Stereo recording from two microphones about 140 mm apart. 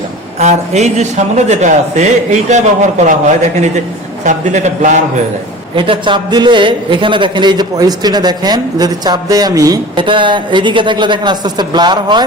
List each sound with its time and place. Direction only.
0.3 s a man's voice: 55° right (ahead or behind)
5.7 s a man's voice: 35° right (ahead or behind)